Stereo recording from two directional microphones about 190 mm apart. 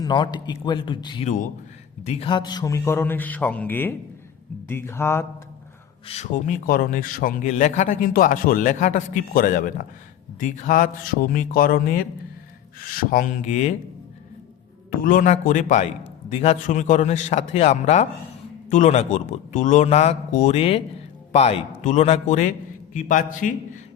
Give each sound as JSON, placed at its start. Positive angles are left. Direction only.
{"t": 0.0, "sound": "a man's voice", "side_deg": 25}
{"t": 6.1, "sound": "a man's voice", "side_deg": 40}
{"t": 14.8, "sound": "a man's voice", "side_deg": 45}